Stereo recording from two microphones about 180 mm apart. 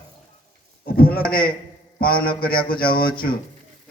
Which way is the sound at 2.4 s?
25° left (ahead or behind).